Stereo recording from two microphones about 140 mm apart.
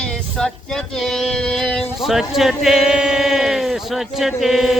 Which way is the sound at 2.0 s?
Centre (ahead or behind).